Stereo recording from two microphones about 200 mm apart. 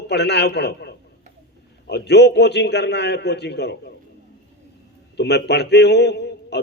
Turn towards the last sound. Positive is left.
turn(degrees=55)  # may be behind; listen again after turning